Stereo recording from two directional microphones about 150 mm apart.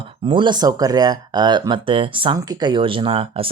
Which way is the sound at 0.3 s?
35° right (ahead or behind).